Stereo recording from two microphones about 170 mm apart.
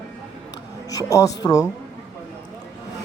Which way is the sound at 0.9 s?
20° left (ahead or behind).